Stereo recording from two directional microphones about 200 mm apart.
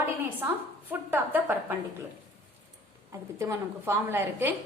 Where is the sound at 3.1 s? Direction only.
15° right (ahead or behind).